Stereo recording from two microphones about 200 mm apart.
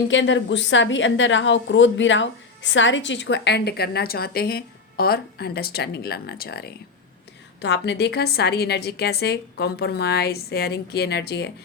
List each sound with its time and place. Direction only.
0.1 s a woman's voice: 70° left (ahead or behind)